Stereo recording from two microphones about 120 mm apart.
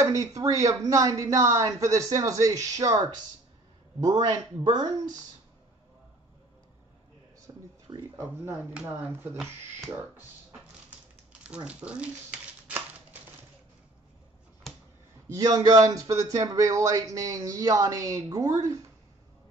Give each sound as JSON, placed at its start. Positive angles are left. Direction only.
{"t": 0.0, "sound": "speech", "side_deg": -30}
{"t": 7.5, "sound": "a sound", "side_deg": -30}
{"t": 7.9, "sound": "speech", "side_deg": -30}
{"t": 8.8, "sound": "speech", "side_deg": -20}
{"t": 11.4, "sound": "a sound", "side_deg": -10}
{"t": 15.2, "sound": "speech", "side_deg": -30}